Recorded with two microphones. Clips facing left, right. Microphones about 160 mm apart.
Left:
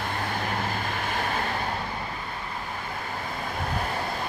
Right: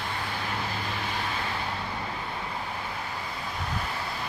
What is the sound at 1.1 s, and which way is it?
Vehicle, 50° left (ahead or behind).